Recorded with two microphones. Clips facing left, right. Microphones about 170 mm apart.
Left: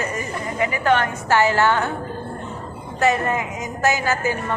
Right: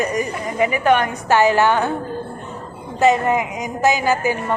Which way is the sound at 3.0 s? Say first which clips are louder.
Right 4 dB; 20° right (ahead or behind).